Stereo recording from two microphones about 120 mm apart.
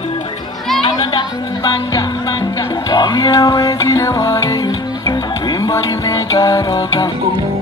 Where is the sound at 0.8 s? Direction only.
40° left (ahead or behind).